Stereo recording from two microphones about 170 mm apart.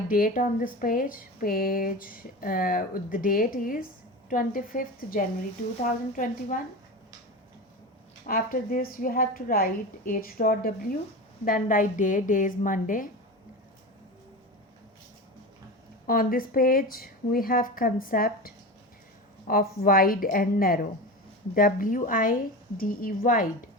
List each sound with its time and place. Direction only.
0.1 s a woman's voice: 55° left (ahead or behind)
8.3 s a woman's voice: 55° left (ahead or behind)
16.0 s speech: 55° left (ahead or behind)